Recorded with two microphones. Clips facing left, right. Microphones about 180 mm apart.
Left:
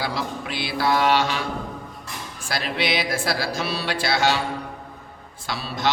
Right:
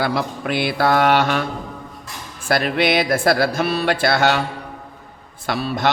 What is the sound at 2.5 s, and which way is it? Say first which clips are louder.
Mantra: right 7 dB; 55° right (ahead or behind).